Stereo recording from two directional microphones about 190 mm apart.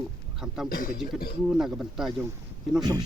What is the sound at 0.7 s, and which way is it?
Speech, 45° left (ahead or behind).